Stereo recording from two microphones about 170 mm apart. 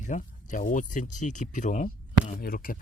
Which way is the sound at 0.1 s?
50° left (ahead or behind).